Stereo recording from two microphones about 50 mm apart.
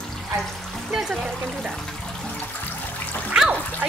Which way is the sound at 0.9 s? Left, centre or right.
Centre.